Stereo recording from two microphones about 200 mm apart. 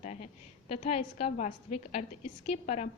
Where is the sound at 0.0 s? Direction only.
35° left (ahead or behind).